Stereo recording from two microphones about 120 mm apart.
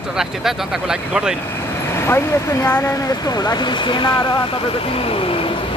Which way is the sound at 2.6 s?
20° left (ahead or behind).